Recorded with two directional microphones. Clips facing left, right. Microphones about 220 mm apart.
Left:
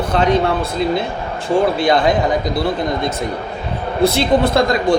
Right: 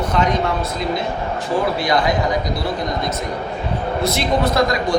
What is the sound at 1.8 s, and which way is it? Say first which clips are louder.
Speech: left 4 dB; 25° left (ahead or behind).